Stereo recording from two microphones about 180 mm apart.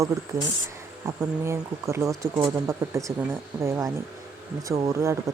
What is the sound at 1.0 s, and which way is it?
Speech, 15° right (ahead or behind).